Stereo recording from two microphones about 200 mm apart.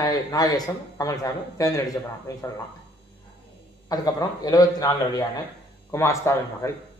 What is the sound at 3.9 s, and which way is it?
Speech, 20° left (ahead or behind).